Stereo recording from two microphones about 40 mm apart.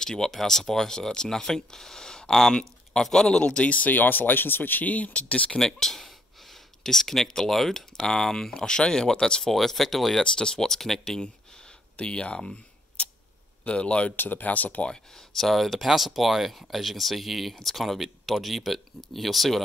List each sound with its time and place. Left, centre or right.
0.0 s speech: centre
3.4 s speech: left
4.8 s speech: left
5.6 s speech: centre
9.5 s speech: centre
10.2 s speech: centre
12.0 s speech: left
13.0 s a sound: left
13.7 s speech: left
14.1 s speech: left
15.3 s speech: centre